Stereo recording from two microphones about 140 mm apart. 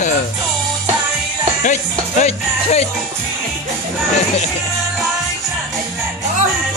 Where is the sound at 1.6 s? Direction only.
60° left (ahead or behind).